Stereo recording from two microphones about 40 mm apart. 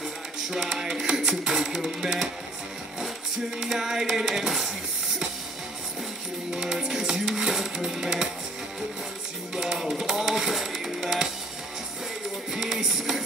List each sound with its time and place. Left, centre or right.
0.6 s a sound: centre
1.4 s music: centre
3.5 s music: centre
6.5 s music: centre
9.6 s music: centre
12.5 s music: centre